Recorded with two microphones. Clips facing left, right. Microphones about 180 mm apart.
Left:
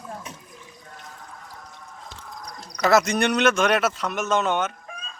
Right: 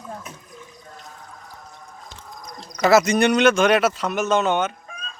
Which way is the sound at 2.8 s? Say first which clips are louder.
Right 3 dB; 5° right (ahead or behind).